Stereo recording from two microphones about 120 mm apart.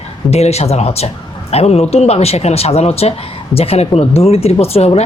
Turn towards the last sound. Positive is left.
turn(degrees=60)  # may be behind; listen again after turning